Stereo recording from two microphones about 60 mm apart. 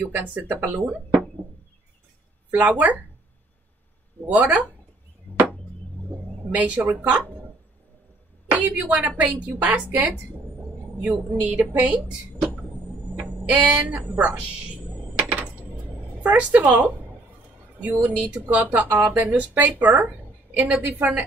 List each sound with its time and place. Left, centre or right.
0.0 s a woman's voice: right
2.5 s a woman's voice: right
4.4 s a woman's voice: right
6.5 s a woman's voice: right
8.5 s a woman's voice: right
11.0 s a woman's voice: right
13.1 s a sound: right
13.8 s a woman's voice: right
15.1 s a sound: right
16.2 s a woman's voice: right